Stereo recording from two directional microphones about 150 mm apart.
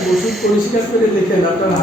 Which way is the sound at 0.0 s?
Centre (ahead or behind).